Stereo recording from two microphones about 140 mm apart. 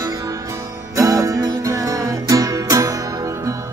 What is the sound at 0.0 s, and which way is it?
Music, 25° right (ahead or behind).